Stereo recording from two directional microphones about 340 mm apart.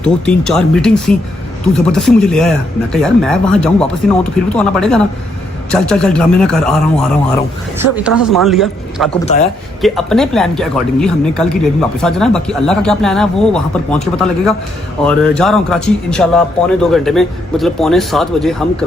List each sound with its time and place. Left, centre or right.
0.0 s speech: centre
8.0 s speech: centre
9.2 s a man's voice: centre
9.8 s speech: centre